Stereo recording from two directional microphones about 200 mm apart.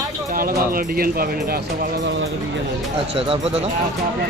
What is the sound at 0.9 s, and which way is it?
Speech, 50° right (ahead or behind).